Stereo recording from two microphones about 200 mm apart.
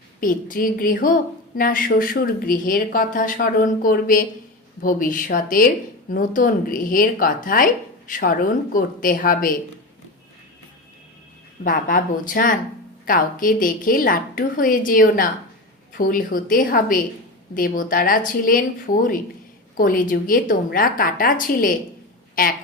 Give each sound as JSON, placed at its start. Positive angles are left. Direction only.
{"t": 0.2, "sound": "a woman's voice", "side_deg": 45}
{"t": 11.6, "sound": "a woman's voice", "side_deg": 45}